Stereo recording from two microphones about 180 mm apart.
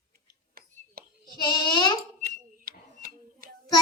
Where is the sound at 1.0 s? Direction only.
55° right (ahead or behind).